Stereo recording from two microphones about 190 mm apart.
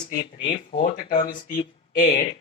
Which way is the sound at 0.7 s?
45° left (ahead or behind).